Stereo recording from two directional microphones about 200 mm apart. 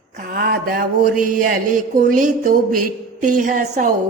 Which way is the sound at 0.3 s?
45° right (ahead or behind).